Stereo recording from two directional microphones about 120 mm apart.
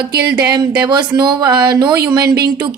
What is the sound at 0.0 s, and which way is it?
Speech, 35° right (ahead or behind).